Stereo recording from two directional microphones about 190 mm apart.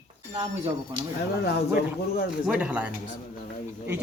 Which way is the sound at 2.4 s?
5° right (ahead or behind).